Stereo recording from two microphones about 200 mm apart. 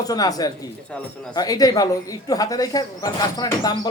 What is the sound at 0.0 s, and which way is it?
Speech, 20° left (ahead or behind).